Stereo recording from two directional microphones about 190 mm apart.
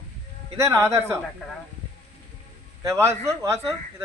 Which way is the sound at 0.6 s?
15° right (ahead or behind).